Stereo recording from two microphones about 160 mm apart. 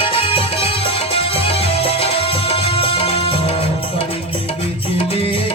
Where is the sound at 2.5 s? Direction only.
35° left (ahead or behind).